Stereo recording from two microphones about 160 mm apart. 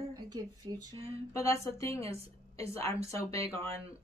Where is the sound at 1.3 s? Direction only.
20° left (ahead or behind).